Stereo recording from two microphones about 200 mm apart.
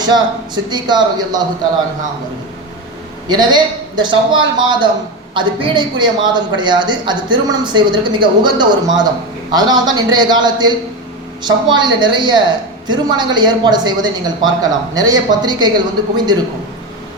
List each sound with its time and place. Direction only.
0.0 s a woman's voice: 20° right (ahead or behind)
3.2 s a woman's voice: 20° right (ahead or behind)